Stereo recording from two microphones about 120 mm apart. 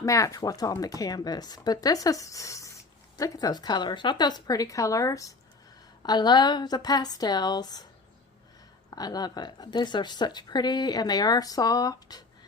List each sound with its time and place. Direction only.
0.0 s speech: 25° left (ahead or behind)
8.9 s speech: 35° left (ahead or behind)